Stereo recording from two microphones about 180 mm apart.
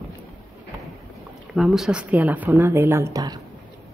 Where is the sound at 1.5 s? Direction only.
Centre (ahead or behind); by 3.3 s 20° right (ahead or behind).